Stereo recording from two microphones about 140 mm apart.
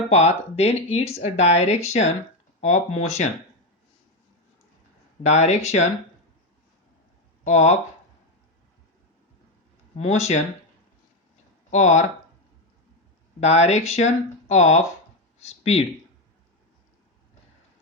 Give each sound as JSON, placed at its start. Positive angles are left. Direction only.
{"t": 0.1, "sound": "speech", "side_deg": 50}
{"t": 5.2, "sound": "speech", "side_deg": 55}
{"t": 7.4, "sound": "speech", "side_deg": 55}
{"t": 10.0, "sound": "speech", "side_deg": 55}
{"t": 11.7, "sound": "speech", "side_deg": 60}
{"t": 13.4, "sound": "speech", "side_deg": 50}